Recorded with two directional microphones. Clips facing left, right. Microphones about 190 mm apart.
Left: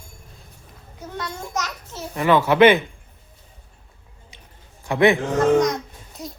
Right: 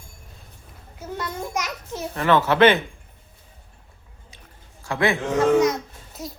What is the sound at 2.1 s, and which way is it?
Speech, 10° left (ahead or behind).